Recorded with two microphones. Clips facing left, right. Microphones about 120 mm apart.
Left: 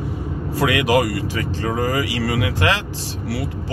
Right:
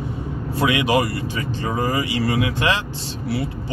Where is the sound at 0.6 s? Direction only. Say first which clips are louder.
Left 1 dB; 80° left.